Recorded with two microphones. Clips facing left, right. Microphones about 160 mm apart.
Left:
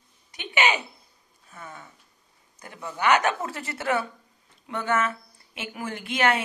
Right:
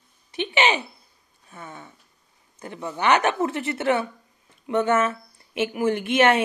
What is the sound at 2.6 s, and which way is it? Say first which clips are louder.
Speech: right 2 dB; 25° right (ahead or behind).